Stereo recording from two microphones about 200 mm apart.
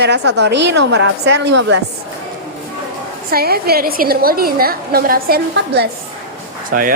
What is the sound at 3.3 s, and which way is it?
A woman's voice, 50° right (ahead or behind).